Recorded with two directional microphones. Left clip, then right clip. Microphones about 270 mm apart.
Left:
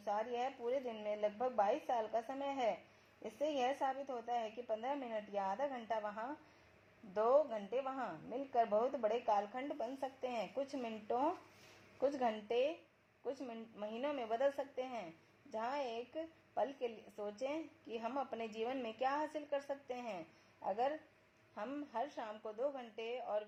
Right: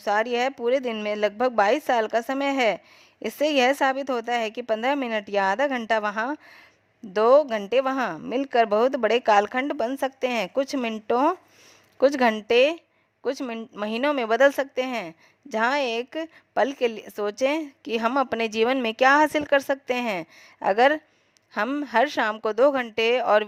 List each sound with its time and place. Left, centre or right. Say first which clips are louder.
0.0 s a woman's voice: right 17 dB; right
9.1 s a woman's voice: right 17 dB; right